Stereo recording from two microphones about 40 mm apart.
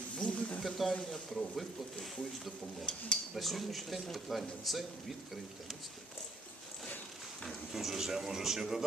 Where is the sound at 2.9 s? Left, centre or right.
Left.